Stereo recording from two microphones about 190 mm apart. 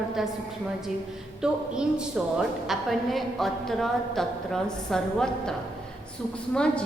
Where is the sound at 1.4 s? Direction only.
5° right (ahead or behind).